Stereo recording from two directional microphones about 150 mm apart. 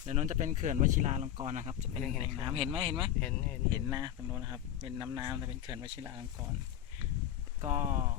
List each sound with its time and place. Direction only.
0.1 s speech: 50° right (ahead or behind)
2.4 s speech: 35° right (ahead or behind)
3.2 s speech: 10° left (ahead or behind)
3.7 s speech: 25° right (ahead or behind)
4.8 s speech: 30° right (ahead or behind)
7.6 s speech: 50° right (ahead or behind)